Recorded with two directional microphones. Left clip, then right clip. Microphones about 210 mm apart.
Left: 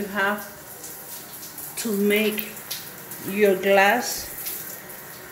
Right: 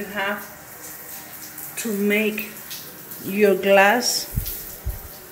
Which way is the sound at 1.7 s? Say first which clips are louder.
Even; centre (ahead or behind).